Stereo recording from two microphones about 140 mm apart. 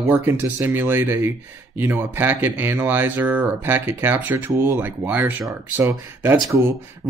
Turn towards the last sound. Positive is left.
turn(degrees=-15)  # may be behind; listen again after turning